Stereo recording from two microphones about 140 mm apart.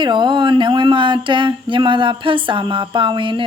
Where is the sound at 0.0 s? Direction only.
35° right (ahead or behind).